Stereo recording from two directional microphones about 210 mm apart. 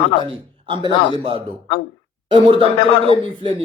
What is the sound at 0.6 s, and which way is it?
Speech, 20° right (ahead or behind).